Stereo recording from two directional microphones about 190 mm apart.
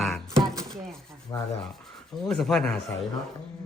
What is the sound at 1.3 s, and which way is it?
Rub, 20° left (ahead or behind).